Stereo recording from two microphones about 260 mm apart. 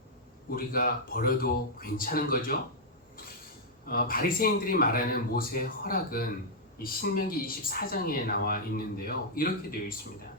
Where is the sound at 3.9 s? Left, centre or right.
Left.